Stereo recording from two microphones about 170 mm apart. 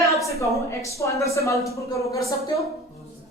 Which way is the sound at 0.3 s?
20° left (ahead or behind).